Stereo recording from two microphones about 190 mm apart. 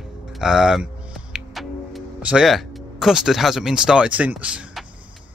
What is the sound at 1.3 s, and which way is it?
Music, centre (ahead or behind).